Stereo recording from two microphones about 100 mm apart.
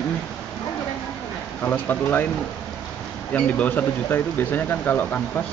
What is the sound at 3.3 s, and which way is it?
Speech, 15° left (ahead or behind).